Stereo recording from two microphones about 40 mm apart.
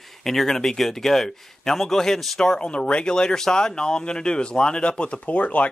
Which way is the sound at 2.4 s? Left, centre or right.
Left.